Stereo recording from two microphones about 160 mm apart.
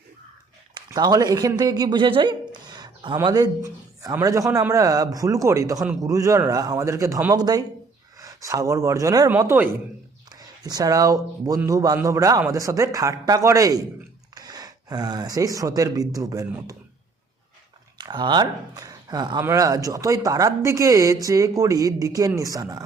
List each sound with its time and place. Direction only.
0.7 s a man's voice: 25° right (ahead or behind)
17.9 s speech: 25° right (ahead or behind)